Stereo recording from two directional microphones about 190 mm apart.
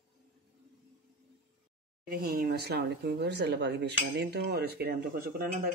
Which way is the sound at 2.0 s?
50° right (ahead or behind).